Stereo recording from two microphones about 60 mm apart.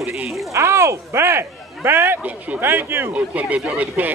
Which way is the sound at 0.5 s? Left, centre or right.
Right.